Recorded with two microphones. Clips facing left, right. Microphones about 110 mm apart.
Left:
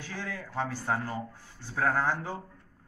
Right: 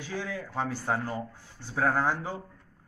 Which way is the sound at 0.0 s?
15° right (ahead or behind).